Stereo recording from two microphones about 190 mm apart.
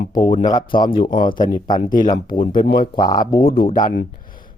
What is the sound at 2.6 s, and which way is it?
Speech, 55° left (ahead or behind).